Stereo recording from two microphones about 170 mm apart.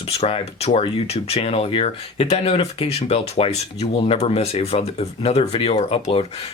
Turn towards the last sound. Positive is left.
turn(degrees=35)  # may be behind; listen again after turning